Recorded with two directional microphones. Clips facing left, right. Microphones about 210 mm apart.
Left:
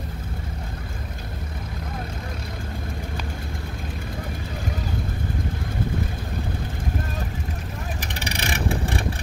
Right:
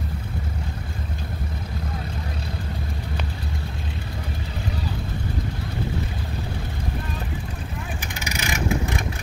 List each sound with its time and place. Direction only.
8.0 s vehicle: 35° left (ahead or behind)